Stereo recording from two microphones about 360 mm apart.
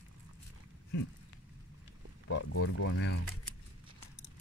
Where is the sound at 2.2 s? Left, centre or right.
Left.